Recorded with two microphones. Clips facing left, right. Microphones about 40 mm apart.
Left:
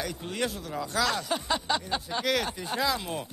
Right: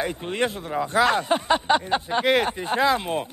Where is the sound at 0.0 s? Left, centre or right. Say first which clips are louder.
Right 6 dB; right.